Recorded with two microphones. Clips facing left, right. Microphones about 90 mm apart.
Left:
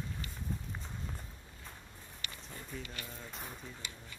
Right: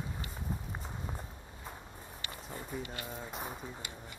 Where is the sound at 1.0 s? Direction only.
25° right (ahead or behind).